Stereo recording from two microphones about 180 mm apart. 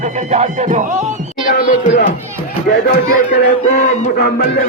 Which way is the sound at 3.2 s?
45° left (ahead or behind).